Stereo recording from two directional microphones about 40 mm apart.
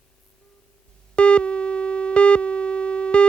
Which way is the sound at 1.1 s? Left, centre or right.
Left.